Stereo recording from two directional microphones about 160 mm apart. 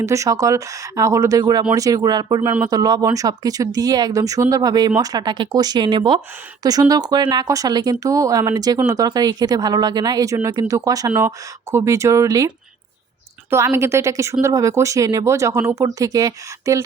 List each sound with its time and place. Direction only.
0.0 s speech: 20° right (ahead or behind)
13.5 s a woman's voice: 15° right (ahead or behind)